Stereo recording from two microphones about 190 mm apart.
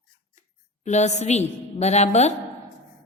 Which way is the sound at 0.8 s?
35° left (ahead or behind).